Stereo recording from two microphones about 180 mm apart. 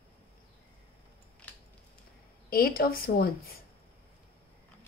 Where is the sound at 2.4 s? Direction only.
55° left (ahead or behind).